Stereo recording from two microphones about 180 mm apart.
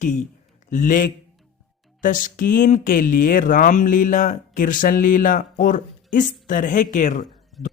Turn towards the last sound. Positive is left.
turn(degrees=45)  # may be behind; listen again after turning